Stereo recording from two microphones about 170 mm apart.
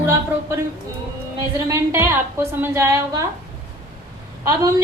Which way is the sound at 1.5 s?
15° right (ahead or behind).